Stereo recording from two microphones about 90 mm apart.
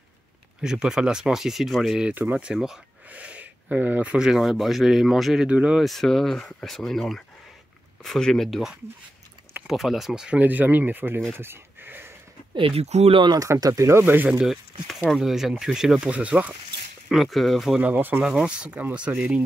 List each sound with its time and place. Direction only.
0.6 s speech: 10° right (ahead or behind)
5.9 s speech: centre (ahead or behind); by 11.2 s 20° right (ahead or behind)
11.3 s a sound: 25° right (ahead or behind)
12.5 s speech: 85° right
13.3 s speech: 40° right (ahead or behind); by 14.3 s 20° right (ahead or behind)
14.4 s speech: 5° right (ahead or behind)
17.1 s speech: centre (ahead or behind)
17.8 s speech: 20° right (ahead or behind)